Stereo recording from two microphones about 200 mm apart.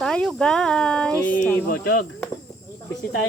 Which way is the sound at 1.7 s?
50° left (ahead or behind).